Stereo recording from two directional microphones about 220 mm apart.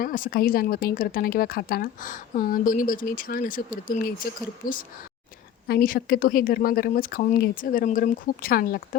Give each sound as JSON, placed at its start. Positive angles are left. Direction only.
{"t": 0.0, "sound": "speech", "side_deg": 40}